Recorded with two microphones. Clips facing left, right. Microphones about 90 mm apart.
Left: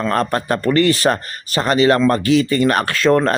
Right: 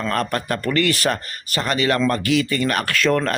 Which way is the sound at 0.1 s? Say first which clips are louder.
Left 4 dB; 30° left (ahead or behind).